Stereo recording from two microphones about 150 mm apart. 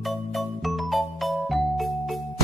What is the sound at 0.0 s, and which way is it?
Music, centre (ahead or behind).